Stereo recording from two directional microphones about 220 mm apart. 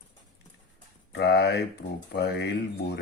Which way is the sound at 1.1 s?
50° left (ahead or behind).